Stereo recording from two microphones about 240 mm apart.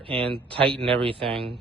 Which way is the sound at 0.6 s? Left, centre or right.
Centre.